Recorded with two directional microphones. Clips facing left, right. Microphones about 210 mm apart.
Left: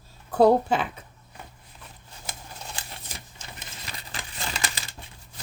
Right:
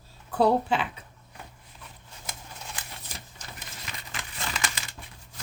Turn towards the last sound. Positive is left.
turn(degrees=35)  # may be behind; listen again after turning